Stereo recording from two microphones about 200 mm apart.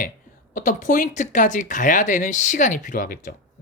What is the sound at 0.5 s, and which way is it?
Speech, 40° left (ahead or behind).